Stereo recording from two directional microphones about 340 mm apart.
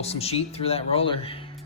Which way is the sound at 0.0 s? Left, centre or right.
Centre.